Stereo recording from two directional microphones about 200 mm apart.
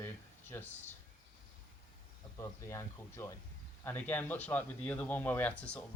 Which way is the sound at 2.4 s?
15° left (ahead or behind).